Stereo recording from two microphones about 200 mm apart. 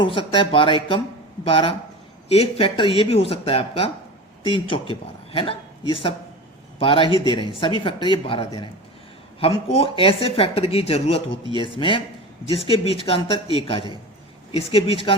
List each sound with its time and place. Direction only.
0.0 s a man's voice: 25° left (ahead or behind)